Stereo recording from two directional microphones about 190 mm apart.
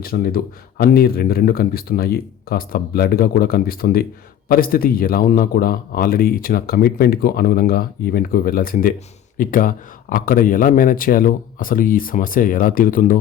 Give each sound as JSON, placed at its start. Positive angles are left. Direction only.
{"t": 0.0, "sound": "speech", "side_deg": 50}